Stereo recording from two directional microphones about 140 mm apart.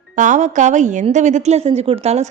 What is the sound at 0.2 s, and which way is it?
A woman's voice, 60° right (ahead or behind).